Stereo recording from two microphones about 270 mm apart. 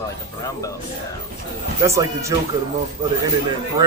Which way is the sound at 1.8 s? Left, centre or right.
Centre.